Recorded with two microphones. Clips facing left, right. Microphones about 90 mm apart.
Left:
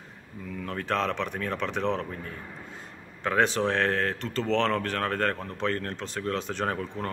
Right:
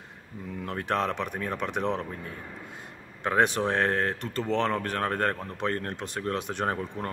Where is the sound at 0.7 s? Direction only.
20° right (ahead or behind).